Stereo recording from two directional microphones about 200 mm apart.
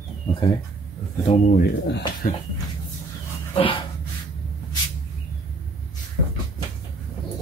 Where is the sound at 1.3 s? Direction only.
40° left (ahead or behind).